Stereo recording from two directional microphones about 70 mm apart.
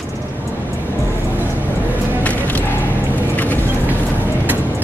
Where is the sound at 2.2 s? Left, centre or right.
Left.